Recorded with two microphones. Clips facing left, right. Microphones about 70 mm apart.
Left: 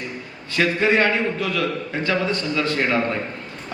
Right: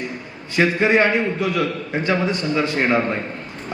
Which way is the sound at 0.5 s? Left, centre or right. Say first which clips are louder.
Right 2 dB; right.